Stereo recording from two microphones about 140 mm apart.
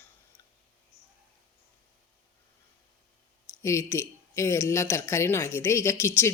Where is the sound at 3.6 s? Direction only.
20° left (ahead or behind).